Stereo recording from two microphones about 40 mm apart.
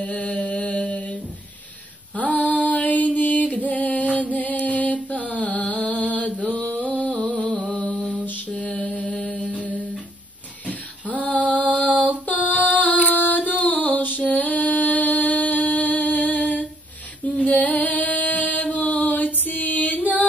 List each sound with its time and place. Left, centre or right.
0.0 s mantra: left
2.1 s mantra: left
3.2 s music: left
7.1 s a sound: centre
7.9 s lullaby: centre
8.5 s mantra: left
9.0 s music: centre
9.4 s music: left
11.1 s female singing: left
11.7 s mantra: left
12.3 s female singing: left
13.1 s music: left
13.4 s a sound: left